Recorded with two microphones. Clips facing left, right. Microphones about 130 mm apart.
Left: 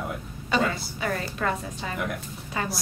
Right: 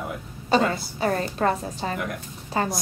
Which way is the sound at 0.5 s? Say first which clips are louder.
Right 4 dB; 35° right (ahead or behind).